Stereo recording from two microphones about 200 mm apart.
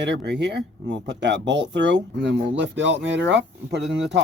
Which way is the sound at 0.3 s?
60° right (ahead or behind).